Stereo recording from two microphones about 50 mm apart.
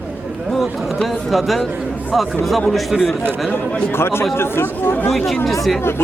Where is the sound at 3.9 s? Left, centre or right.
Left.